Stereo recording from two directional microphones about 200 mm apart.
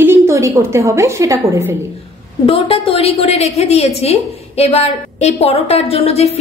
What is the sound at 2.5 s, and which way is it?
A woman's voice, 25° left (ahead or behind).